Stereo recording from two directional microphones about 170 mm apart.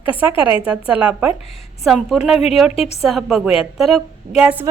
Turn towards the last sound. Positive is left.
turn(degrees=-10)  # may be behind; listen again after turning